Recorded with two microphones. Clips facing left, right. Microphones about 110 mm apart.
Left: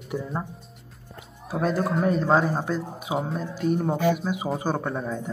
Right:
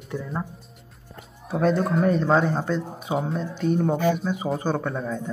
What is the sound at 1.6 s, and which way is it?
A man's voice, 5° left (ahead or behind).